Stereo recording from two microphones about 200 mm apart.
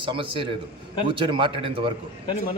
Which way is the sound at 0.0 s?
25° right (ahead or behind).